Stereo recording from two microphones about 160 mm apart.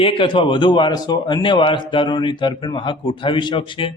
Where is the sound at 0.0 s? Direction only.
35° left (ahead or behind).